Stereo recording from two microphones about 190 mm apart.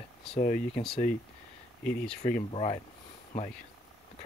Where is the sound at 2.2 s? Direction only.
35° left (ahead or behind).